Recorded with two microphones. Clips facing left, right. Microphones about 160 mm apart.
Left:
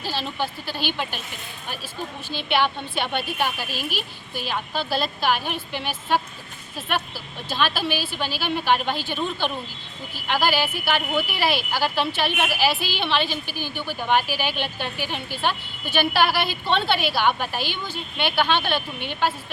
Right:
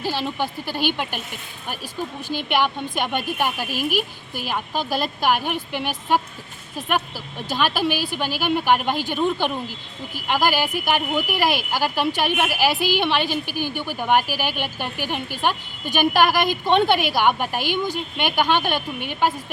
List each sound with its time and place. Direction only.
0.0 s a woman's voice: 15° right (ahead or behind)
2.6 s a woman's voice: 10° right (ahead or behind)